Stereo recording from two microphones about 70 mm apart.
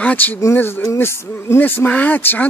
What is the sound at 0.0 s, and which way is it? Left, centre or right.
Speech, left.